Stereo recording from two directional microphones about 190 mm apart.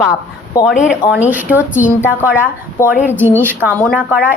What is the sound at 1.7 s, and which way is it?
Speech, 10° left (ahead or behind).